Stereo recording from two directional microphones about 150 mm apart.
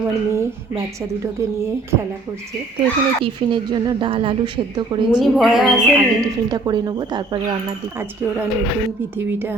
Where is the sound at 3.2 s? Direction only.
35° right (ahead or behind).